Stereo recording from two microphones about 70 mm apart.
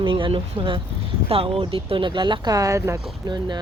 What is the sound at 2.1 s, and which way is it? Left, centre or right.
Speech, right.